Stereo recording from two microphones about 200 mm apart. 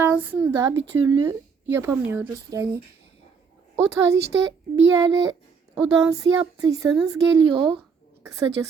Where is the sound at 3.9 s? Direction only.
15° right (ahead or behind).